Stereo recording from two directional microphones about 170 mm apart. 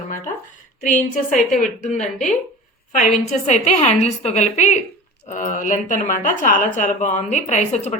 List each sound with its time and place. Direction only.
0.8 s speech: 50° left (ahead or behind)